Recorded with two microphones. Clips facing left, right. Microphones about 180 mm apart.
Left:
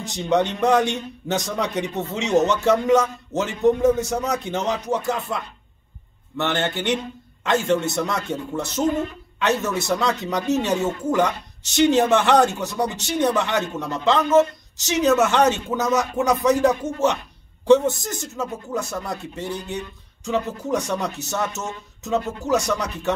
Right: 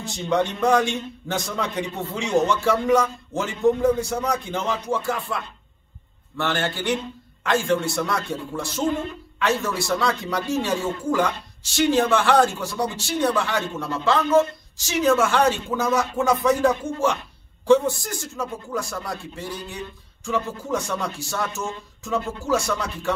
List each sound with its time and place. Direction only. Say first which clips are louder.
0.0 s speech: left 2 dB; 20° left (ahead or behind)